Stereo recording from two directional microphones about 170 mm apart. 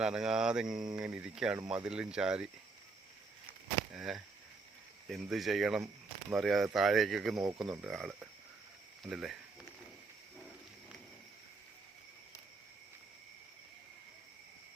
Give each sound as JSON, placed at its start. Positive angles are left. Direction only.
{"t": 0.0, "sound": "speech", "side_deg": -5}
{"t": 3.9, "sound": "speech", "side_deg": 0}